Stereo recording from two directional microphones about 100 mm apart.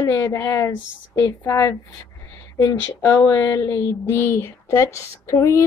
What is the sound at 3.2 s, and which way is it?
Speech, 30° left (ahead or behind).